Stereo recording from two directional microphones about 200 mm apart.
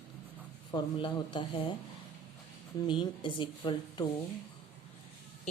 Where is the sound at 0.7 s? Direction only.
25° left (ahead or behind).